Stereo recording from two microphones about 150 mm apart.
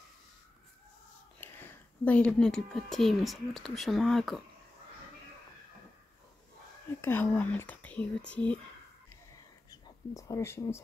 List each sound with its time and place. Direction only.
1.4 s speech: 10° left (ahead or behind)
7.0 s speech: 15° left (ahead or behind)
9.7 s speech: 20° left (ahead or behind)